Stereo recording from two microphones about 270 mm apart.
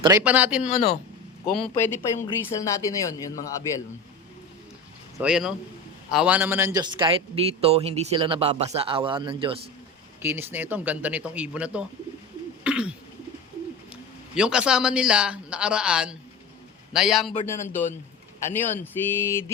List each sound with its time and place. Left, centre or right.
0.0 s speech: centre
1.7 s a sound: centre
2.0 s a woman's voice: centre
2.4 s a sound: centre
5.1 s a man's voice: centre
10.2 s speech: centre
12.6 s bird: centre
13.9 s a man's voice: centre
17.4 s a sound: centre